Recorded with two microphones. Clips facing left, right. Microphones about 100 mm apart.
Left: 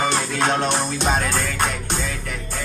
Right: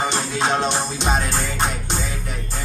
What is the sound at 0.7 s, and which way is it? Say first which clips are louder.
Music: left 1 dB; 50° left (ahead or behind).